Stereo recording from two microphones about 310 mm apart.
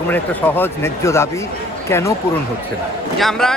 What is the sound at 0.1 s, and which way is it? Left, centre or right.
Speech, centre.